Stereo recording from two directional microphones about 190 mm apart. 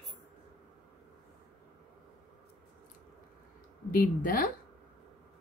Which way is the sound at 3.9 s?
50° left (ahead or behind).